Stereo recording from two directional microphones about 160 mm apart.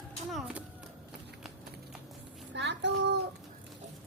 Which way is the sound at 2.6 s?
90° right.